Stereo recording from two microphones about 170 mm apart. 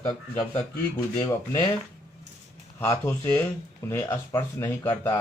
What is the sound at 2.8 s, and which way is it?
A man's voice, 15° left (ahead or behind).